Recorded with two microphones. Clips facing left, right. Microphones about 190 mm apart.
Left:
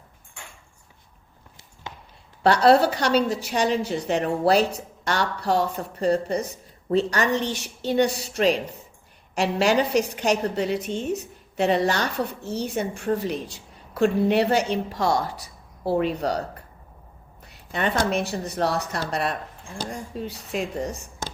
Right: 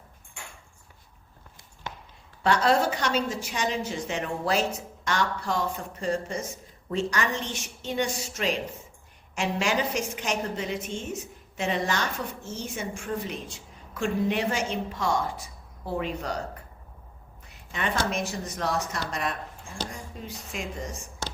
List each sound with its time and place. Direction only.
2.4 s a woman's voice: 35° left (ahead or behind)
17.7 s a woman's voice: 35° left (ahead or behind)
19.9 s speech: 65° left (ahead or behind)
20.5 s a woman's voice: 35° left (ahead or behind)